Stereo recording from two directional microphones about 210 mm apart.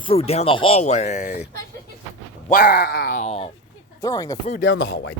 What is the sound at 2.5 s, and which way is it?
Speech, 45° left (ahead or behind).